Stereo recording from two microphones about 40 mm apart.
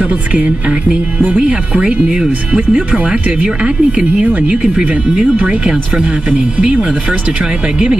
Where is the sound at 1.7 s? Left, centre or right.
Right.